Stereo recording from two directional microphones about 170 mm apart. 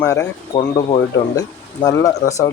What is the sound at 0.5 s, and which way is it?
Speech, 30° left (ahead or behind).